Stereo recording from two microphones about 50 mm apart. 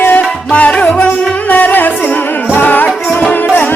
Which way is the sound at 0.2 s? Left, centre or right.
Left.